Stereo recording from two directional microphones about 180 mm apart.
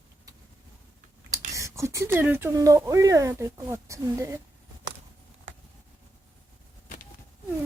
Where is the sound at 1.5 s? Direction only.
15° right (ahead or behind).